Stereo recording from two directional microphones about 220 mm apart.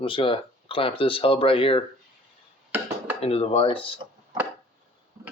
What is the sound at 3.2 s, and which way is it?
Speech, 25° left (ahead or behind).